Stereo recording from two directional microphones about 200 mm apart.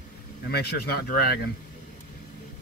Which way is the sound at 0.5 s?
50° left (ahead or behind).